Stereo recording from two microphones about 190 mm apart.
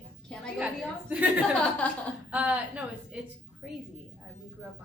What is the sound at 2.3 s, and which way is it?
A woman's voice, 5° right (ahead or behind).